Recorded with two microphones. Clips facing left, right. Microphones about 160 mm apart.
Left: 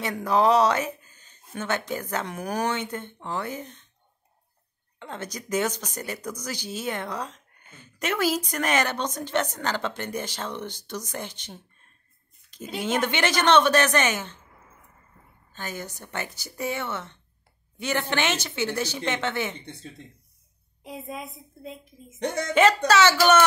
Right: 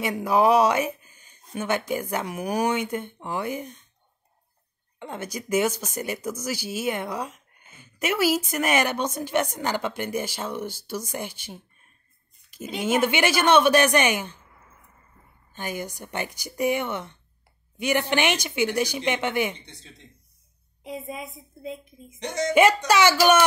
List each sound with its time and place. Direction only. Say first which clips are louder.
0.0 s speech: right 1 dB; 10° right (ahead or behind)
4.9 s speech: right 2 dB; 10° right (ahead or behind)
12.5 s a sound: right 2 dB; 10° right (ahead or behind)
12.8 s speech: right 3 dB; 10° right (ahead or behind)
15.5 s speech: right 4 dB; 15° right (ahead or behind)
19.6 s speech: left 8 dB; 55° left (ahead or behind)
20.8 s a woman's voice: right 2 dB; centre (ahead or behind)
22.2 s speech: even; 55° left (ahead or behind)
22.5 s speech: right 1 dB; 10° right (ahead or behind)